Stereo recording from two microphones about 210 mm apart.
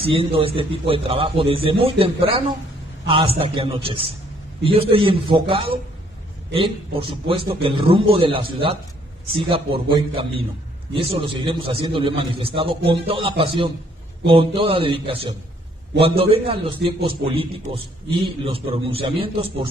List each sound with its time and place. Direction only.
0.0 s a man's voice: 25° right (ahead or behind)